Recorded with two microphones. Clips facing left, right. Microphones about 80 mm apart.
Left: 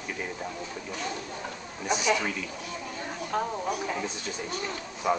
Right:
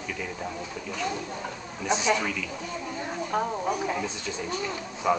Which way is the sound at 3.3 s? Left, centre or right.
Centre.